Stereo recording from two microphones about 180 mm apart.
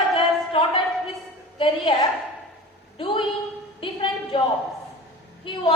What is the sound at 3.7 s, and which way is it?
Speech, 30° left (ahead or behind).